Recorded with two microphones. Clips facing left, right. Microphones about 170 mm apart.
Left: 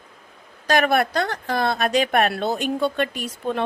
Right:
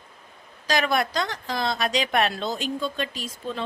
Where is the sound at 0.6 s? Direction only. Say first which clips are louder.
Left 5 dB; 55° left (ahead or behind).